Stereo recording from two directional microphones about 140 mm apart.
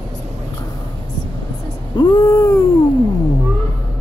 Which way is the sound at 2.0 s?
30° left (ahead or behind).